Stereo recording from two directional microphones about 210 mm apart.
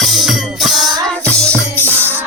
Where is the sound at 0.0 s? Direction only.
Centre (ahead or behind).